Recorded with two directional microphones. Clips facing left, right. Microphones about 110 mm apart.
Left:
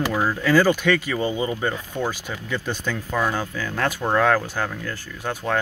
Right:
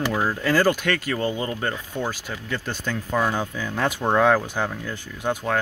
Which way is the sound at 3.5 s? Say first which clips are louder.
Even; 15° right (ahead or behind).